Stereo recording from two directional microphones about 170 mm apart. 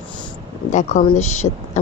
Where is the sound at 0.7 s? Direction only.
45° left (ahead or behind).